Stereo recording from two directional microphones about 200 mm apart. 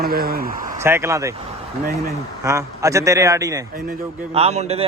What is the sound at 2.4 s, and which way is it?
A man's voice, 15° right (ahead or behind).